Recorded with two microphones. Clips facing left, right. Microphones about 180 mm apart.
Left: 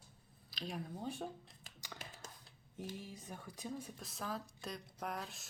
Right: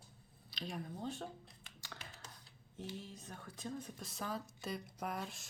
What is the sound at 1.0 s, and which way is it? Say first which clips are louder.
Speech: left 1 dB; 15° left (ahead or behind).